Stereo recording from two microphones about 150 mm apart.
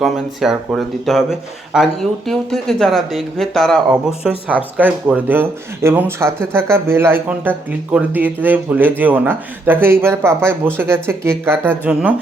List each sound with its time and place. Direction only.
0.0 s speech: centre (ahead or behind)